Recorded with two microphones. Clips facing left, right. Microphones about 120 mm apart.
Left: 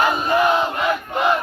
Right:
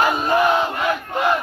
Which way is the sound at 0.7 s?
20° left (ahead or behind).